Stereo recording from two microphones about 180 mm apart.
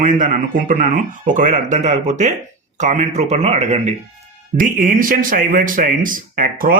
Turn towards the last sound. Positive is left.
turn(degrees=-50)  # may be behind; listen again after turning